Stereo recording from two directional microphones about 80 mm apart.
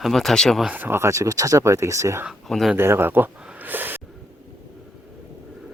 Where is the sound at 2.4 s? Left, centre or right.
Centre.